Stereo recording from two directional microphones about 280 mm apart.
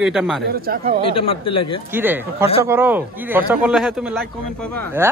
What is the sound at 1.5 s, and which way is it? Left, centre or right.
Speech, centre.